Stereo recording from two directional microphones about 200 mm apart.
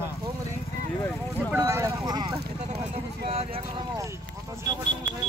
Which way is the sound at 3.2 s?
30° right (ahead or behind).